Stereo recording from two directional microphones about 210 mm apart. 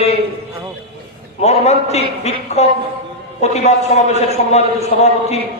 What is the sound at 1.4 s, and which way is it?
A man's voice, 30° left (ahead or behind).